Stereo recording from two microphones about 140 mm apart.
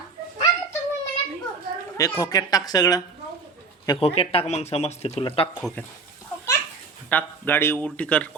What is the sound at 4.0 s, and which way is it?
Speech, 45° left (ahead or behind).